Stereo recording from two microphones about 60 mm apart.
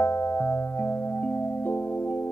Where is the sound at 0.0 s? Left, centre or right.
Left.